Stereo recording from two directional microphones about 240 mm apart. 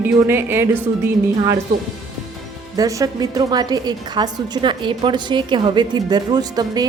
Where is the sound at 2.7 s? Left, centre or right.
Centre.